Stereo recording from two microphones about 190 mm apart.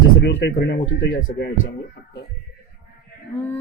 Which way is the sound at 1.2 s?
55° left (ahead or behind).